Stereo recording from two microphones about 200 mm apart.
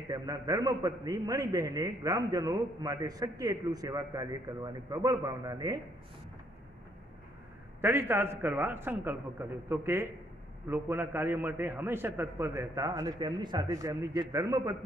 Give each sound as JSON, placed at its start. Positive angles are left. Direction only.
{"t": 0.1, "sound": "a man's voice", "side_deg": -20}
{"t": 7.8, "sound": "a man's voice", "side_deg": -10}